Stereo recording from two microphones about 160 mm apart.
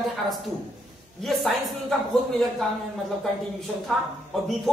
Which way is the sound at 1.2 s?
Centre (ahead or behind).